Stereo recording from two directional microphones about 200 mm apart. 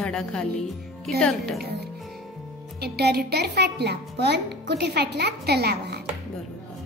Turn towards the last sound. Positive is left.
turn(degrees=-55)  # may be behind; listen again after turning